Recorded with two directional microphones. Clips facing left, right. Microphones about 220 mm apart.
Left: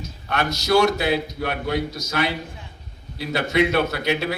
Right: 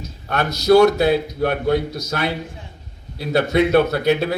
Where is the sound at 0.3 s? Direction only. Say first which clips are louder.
Right 6 dB; 40° right (ahead or behind).